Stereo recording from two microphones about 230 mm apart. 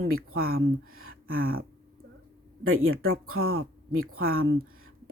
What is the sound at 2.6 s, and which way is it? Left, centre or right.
Speech, right.